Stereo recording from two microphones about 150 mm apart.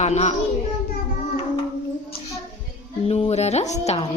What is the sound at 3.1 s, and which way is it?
Speech, 40° left (ahead or behind).